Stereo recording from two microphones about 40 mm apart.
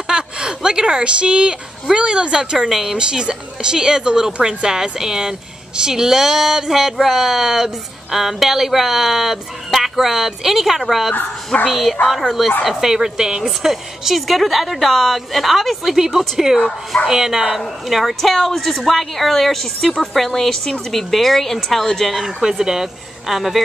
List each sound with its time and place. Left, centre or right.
0.1 s a woman's voice: centre
2.7 s speech: centre
3.0 s a woman's voice: right; by 22.1 s centre
22.1 s speech: centre